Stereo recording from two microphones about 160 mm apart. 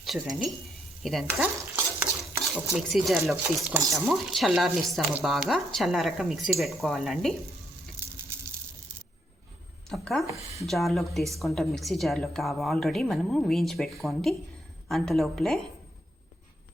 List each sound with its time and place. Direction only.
0.0 s a woman's voice: centre (ahead or behind)
7.9 s sizzle: 15° right (ahead or behind)
9.9 s a sound: centre (ahead or behind)
10.7 s a woman's voice: centre (ahead or behind)